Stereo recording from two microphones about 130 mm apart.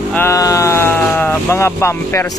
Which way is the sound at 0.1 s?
20° left (ahead or behind).